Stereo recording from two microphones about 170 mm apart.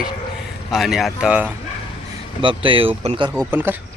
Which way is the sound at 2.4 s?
30° right (ahead or behind).